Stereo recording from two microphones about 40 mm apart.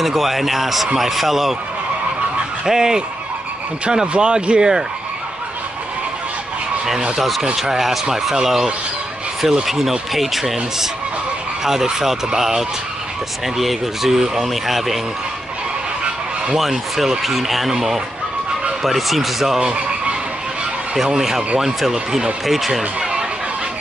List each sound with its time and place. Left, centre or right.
0.0 s speech: centre
2.6 s speech: centre
4.1 s speech: right
7.5 s speech: centre
16.5 s speech: centre
19.6 s vehicle: right
20.9 s speech: centre
21.9 s speech: centre
22.5 s speech: centre